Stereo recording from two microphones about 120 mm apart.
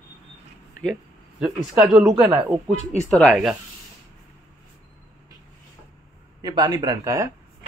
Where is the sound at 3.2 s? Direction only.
5° left (ahead or behind).